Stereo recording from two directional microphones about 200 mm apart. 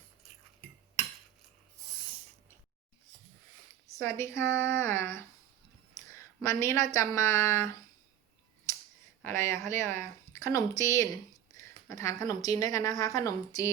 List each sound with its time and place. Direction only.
3.9 s a woman's voice: 10° left (ahead or behind)
9.2 s speech: 15° left (ahead or behind)